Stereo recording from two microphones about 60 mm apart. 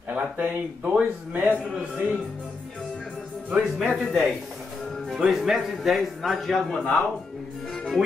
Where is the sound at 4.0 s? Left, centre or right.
Centre.